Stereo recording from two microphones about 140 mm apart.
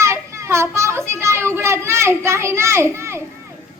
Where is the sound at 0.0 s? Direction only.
20° right (ahead or behind).